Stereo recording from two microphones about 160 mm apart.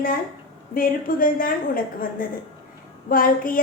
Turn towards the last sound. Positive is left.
turn(degrees=60)  # may be behind; listen again after turning